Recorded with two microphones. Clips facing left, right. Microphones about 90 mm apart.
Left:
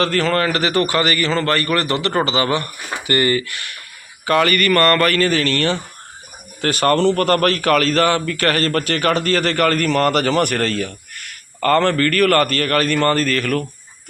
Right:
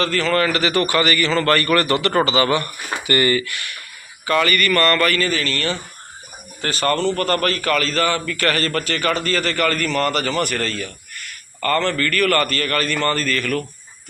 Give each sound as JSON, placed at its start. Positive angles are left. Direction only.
{"t": 0.0, "sound": "speech", "side_deg": 50}
{"t": 0.4, "sound": "a man's voice", "side_deg": 35}
{"t": 1.4, "sound": "speech", "side_deg": 20}
{"t": 4.3, "sound": "a man's voice", "side_deg": 55}
{"t": 8.3, "sound": "a man's voice", "side_deg": 45}